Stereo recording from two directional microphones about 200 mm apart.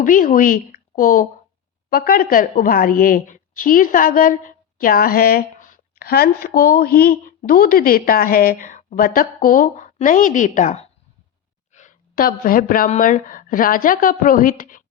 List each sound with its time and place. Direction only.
0.0 s a woman's voice: 40° left (ahead or behind)